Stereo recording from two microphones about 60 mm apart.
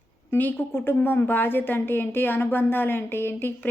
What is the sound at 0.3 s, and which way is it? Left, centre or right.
Speech, left.